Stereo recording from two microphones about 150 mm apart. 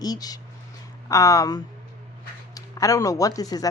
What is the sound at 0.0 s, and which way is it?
Speech, 25° left (ahead or behind).